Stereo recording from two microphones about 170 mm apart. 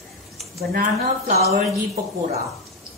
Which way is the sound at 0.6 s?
55° right (ahead or behind).